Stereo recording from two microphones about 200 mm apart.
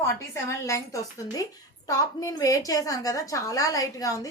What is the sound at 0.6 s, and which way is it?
A woman's voice, 15° left (ahead or behind).